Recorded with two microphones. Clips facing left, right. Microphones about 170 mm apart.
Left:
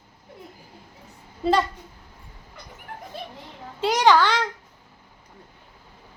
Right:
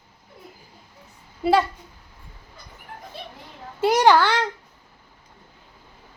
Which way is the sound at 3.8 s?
10° right (ahead or behind).